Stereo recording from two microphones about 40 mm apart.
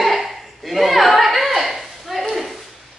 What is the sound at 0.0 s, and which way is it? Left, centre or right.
Chuckle, centre.